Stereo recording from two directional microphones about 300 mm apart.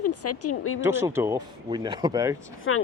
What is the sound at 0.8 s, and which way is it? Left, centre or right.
Speech, centre.